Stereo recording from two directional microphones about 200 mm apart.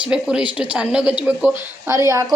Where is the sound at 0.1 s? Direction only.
5° right (ahead or behind).